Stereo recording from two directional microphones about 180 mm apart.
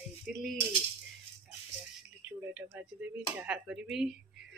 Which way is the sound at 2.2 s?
10° right (ahead or behind).